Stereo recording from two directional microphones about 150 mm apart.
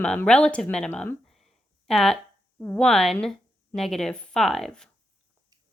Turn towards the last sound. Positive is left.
turn(degrees=5)  # may be behind; listen again after turning